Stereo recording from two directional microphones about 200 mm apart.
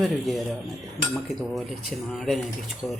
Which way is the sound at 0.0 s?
Centre (ahead or behind).